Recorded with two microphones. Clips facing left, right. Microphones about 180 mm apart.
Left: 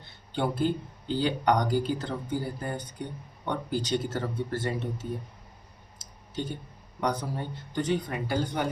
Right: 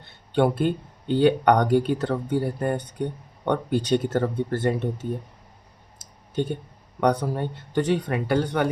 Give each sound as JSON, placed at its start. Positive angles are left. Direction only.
{"t": 0.3, "sound": "speech", "side_deg": -60}
{"t": 7.0, "sound": "speech", "side_deg": -65}